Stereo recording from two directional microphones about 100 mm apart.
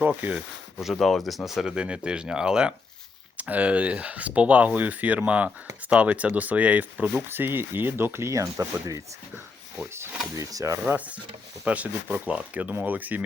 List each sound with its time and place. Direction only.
0.0 s speech: 15° right (ahead or behind)
0.8 s speech: centre (ahead or behind); by 10.8 s 35° right (ahead or behind)
10.8 s speech: 15° right (ahead or behind)